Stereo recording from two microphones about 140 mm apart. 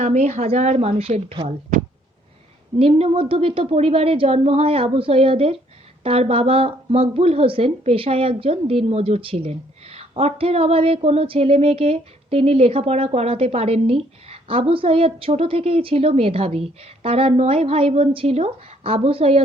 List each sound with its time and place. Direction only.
0.0 s speech: 55° right (ahead or behind)
2.7 s speech: 45° right (ahead or behind)